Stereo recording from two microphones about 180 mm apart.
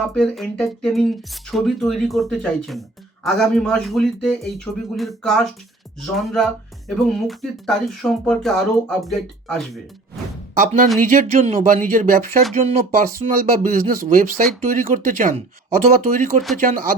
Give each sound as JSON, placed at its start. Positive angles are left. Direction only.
{"t": 0.1, "sound": "speech", "side_deg": 5}
{"t": 11.0, "sound": "speech", "side_deg": -45}